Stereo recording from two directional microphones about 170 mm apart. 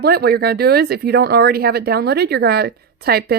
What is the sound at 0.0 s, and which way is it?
Speech, 65° right (ahead or behind).